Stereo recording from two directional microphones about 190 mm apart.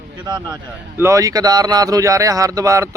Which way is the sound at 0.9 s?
15° right (ahead or behind).